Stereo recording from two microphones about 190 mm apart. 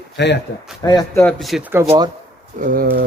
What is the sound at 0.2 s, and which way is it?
Speech, 65° left (ahead or behind).